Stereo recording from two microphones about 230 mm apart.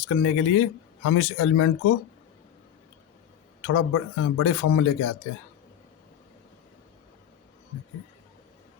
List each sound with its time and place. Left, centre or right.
0.1 s speech: left
3.6 s speech: left